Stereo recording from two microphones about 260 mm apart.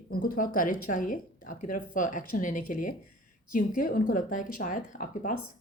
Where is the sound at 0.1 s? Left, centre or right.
Left.